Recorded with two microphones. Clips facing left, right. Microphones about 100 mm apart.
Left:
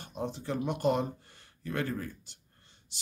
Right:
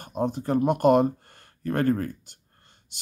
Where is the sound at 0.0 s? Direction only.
50° right (ahead or behind).